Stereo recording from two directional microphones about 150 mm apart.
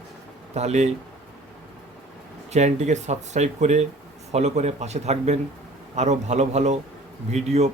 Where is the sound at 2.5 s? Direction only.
50° right (ahead or behind).